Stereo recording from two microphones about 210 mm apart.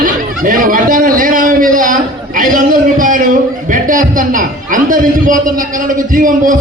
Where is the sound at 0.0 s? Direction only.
40° right (ahead or behind).